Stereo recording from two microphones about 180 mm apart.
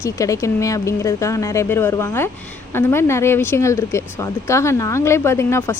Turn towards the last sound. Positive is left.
turn(degrees=15)  # may be behind; listen again after turning